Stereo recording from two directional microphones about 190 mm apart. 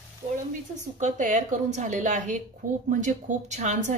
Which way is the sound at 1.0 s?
40° right (ahead or behind).